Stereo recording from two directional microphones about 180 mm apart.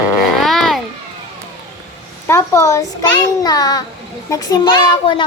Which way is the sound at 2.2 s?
15° left (ahead or behind).